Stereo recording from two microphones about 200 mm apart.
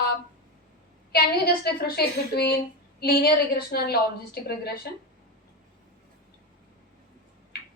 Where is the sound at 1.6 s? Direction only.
55° left (ahead or behind).